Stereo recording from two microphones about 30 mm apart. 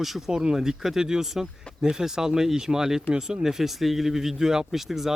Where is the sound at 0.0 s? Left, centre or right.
Centre.